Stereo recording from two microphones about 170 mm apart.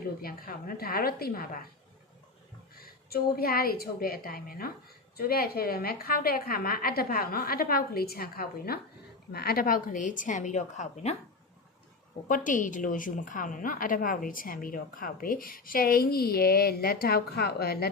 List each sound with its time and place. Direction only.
0.2 s a woman's voice: 60° left (ahead or behind)
2.7 s a woman's voice: 65° left (ahead or behind); by 11.2 s 40° left (ahead or behind)
12.3 s a woman's voice: 50° left (ahead or behind); by 17.8 s 70° left (ahead or behind)